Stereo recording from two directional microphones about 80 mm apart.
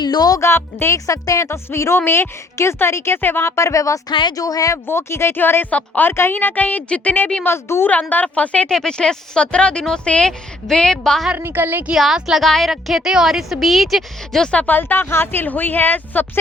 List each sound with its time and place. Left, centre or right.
0.0 s speech: left
0.3 s a woman's voice: left
1.5 s a woman's voice: left
4.1 s speech: left
4.4 s speech: left
4.9 s speech: left
7.4 s a woman's voice: left
8.1 s speech: centre
11.3 s a woman's voice: right
11.9 s a woman's voice: centre
14.4 s speech: centre